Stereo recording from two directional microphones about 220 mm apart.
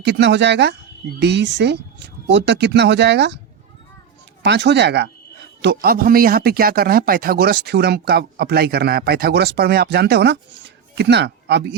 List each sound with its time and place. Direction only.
0.0 s speech: 50° right (ahead or behind)
4.4 s speech: 50° right (ahead or behind)